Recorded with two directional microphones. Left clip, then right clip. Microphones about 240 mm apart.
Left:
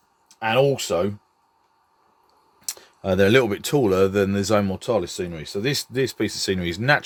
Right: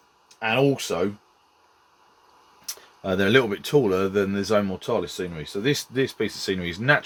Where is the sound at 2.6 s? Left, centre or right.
Left.